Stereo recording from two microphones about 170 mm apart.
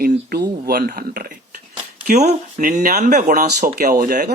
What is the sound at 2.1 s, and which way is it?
Speech, 45° right (ahead or behind).